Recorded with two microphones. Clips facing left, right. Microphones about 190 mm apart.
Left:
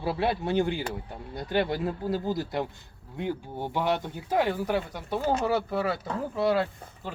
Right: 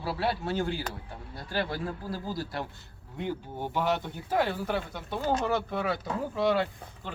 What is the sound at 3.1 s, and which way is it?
Speech, 10° left (ahead or behind).